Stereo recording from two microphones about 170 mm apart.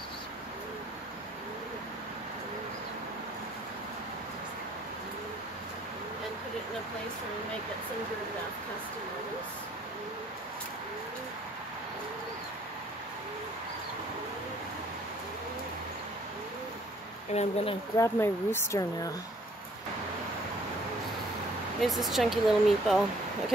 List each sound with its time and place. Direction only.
17.3 s speech: 40° left (ahead or behind)
17.9 s speech: 15° left (ahead or behind)
21.8 s speech: centre (ahead or behind)